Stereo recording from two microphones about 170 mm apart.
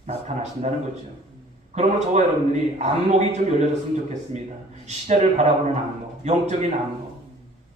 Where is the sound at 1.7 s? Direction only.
40° right (ahead or behind).